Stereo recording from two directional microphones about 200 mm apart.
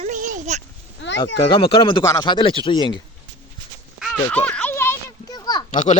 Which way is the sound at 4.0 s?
Centre (ahead or behind).